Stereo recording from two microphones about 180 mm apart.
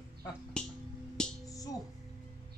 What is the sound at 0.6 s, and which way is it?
Speech, 5° left (ahead or behind).